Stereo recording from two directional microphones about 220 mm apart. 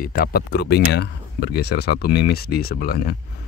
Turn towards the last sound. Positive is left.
turn(degrees=45)  # may be behind; listen again after turning